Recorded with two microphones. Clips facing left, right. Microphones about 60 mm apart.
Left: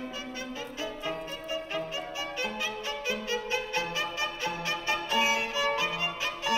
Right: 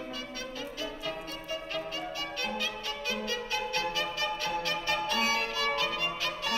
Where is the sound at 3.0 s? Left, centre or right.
Centre.